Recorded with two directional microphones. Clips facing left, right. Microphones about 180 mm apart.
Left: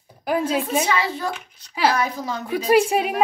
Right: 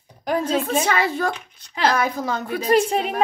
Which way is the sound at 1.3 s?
10° left (ahead or behind).